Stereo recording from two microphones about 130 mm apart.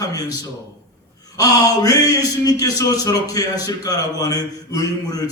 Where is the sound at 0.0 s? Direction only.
30° left (ahead or behind).